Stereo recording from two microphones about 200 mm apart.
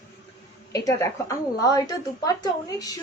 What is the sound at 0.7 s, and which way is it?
A woman's voice, 15° left (ahead or behind).